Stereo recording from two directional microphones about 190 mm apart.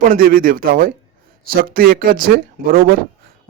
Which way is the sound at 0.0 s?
50° right (ahead or behind).